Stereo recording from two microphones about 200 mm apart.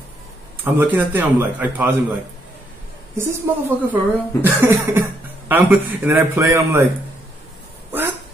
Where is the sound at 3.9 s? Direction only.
10° right (ahead or behind).